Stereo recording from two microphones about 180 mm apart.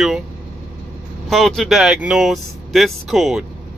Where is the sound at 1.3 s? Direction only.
Centre (ahead or behind).